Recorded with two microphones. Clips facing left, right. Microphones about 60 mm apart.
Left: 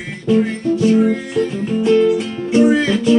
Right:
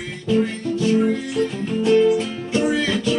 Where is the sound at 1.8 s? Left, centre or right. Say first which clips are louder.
Left 2 dB; centre.